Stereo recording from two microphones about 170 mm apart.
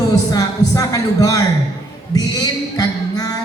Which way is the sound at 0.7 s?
20° left (ahead or behind).